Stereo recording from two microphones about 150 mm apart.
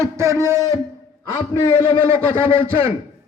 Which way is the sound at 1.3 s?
25° left (ahead or behind).